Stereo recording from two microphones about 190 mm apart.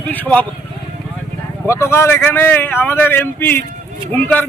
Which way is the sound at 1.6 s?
15° left (ahead or behind).